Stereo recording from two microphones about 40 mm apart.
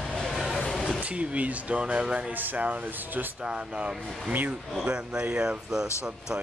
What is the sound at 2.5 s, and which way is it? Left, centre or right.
Speech, right.